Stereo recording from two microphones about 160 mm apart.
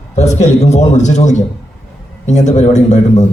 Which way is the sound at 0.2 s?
45° left (ahead or behind).